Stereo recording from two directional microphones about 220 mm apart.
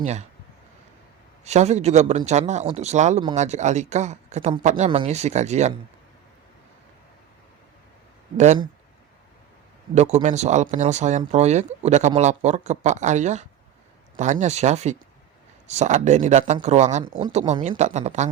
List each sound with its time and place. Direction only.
0.0 s speech: 30° right (ahead or behind)
1.5 s speech: 30° right (ahead or behind)
9.9 s speech: 30° right (ahead or behind)